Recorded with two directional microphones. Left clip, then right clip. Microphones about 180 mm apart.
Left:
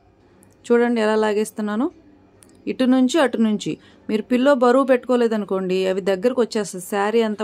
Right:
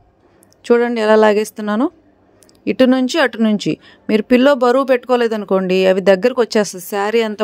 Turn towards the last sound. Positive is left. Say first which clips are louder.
# right 3 dB
turn(degrees=-45)  # may be behind; listen again after turning